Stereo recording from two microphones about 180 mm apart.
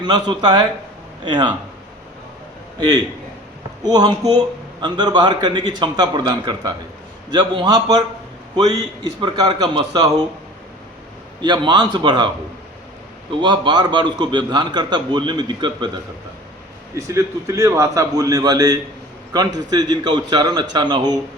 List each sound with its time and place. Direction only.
0.0 s a man's voice: 25° right (ahead or behind)
2.7 s a man's voice: 25° right (ahead or behind)
11.3 s a man's voice: 25° right (ahead or behind)
13.3 s a man's voice: 25° right (ahead or behind)
16.9 s a man's voice: 15° right (ahead or behind)